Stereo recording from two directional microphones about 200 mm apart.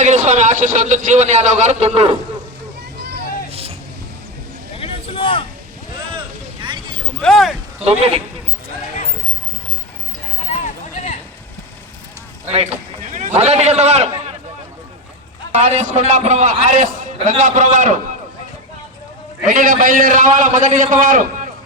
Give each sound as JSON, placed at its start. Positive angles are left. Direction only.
{"t": 0.0, "sound": "a man's voice", "side_deg": -35}
{"t": 3.5, "sound": "vehicle", "side_deg": -30}
{"t": 4.8, "sound": "a sound", "side_deg": 25}
{"t": 6.1, "sound": "vehicle", "side_deg": -25}
{"t": 7.2, "sound": "speech", "side_deg": 0}
{"t": 7.9, "sound": "a man's voice", "side_deg": -30}
{"t": 13.1, "sound": "a man's voice", "side_deg": -35}
{"t": 15.5, "sound": "a man's voice", "side_deg": -30}
{"t": 19.5, "sound": "a man's voice", "side_deg": -40}